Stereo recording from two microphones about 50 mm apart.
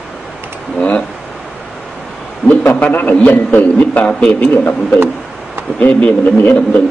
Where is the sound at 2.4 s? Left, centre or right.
Left.